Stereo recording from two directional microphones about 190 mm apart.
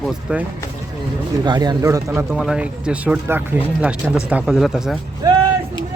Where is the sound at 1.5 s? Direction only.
20° right (ahead or behind).